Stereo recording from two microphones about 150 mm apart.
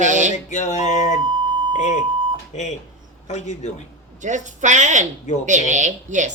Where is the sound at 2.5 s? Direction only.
50° left (ahead or behind).